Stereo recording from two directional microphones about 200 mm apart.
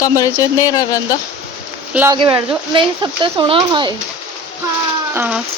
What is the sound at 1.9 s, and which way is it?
Speech, 10° right (ahead or behind).